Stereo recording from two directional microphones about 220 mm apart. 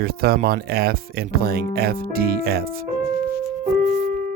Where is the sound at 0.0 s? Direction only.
45° right (ahead or behind).